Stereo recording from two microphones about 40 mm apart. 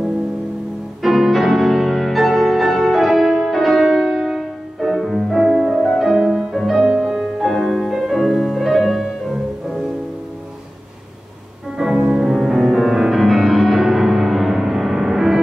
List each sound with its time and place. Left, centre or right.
1.0 s music: centre
5.8 s music: centre
6.0 s music: centre
11.8 s music: centre